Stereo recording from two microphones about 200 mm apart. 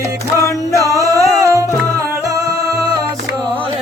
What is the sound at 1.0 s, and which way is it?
Music, 15° right (ahead or behind).